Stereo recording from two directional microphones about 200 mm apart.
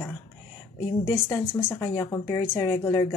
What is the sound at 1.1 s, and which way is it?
Speech, 15° left (ahead or behind).